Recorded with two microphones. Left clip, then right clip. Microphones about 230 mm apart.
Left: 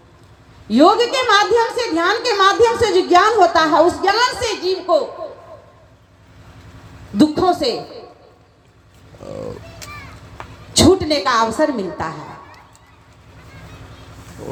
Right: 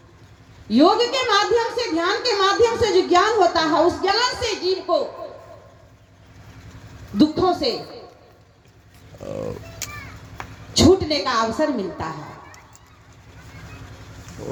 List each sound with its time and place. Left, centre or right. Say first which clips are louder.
0.7 s a woman's voice: left 4 dB; left
7.2 s a woman's voice: left 3 dB; left
9.2 s music: even; centre
9.8 s chop: right 2 dB; right
10.4 s a sound: even; right
10.8 s a woman's voice: left 3 dB; left